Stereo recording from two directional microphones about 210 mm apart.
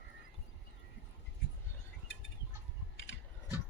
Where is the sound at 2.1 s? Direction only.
65° left (ahead or behind).